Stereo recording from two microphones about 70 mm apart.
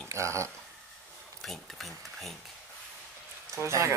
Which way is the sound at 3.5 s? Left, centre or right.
Right.